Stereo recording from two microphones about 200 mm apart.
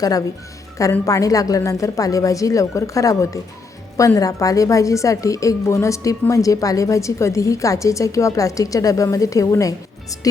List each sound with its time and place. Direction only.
0.0 s a woman's voice: 20° left (ahead or behind)